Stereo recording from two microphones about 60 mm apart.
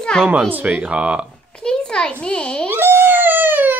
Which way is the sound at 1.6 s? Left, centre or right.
Centre.